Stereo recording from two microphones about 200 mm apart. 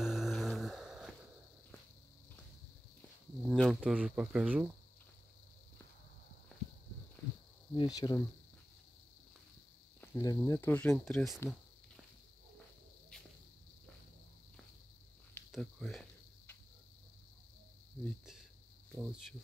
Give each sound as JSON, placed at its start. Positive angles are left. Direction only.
{"t": 0.0, "sound": "a sound", "side_deg": 0}
{"t": 3.4, "sound": "speech", "side_deg": 0}
{"t": 6.5, "sound": "horse", "side_deg": 5}
{"t": 7.7, "sound": "cricket", "side_deg": 20}
{"t": 9.9, "sound": "speech", "side_deg": 15}
{"t": 15.5, "sound": "cricket", "side_deg": 5}
{"t": 18.0, "sound": "speech", "side_deg": 0}